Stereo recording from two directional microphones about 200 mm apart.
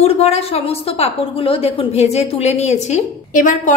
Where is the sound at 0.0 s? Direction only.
30° left (ahead or behind).